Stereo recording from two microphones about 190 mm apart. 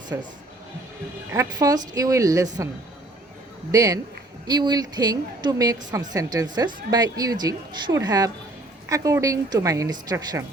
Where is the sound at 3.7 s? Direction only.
20° right (ahead or behind).